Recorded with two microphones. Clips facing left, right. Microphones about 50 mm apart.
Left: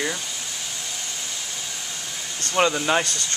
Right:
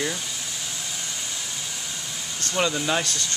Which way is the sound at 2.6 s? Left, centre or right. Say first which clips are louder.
Left 4 dB; left.